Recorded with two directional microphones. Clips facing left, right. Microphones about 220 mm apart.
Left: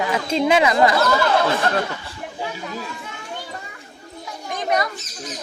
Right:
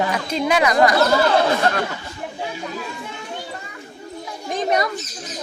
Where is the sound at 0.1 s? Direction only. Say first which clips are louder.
Left 2 dB; 25° left (ahead or behind).